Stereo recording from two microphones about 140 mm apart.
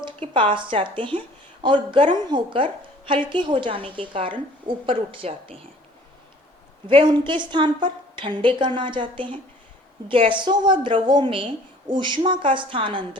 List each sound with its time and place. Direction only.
0.0 s a woman's voice: 40° right (ahead or behind)
6.8 s a woman's voice: 35° right (ahead or behind)